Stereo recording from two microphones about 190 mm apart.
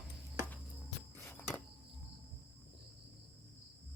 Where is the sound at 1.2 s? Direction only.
10° left (ahead or behind).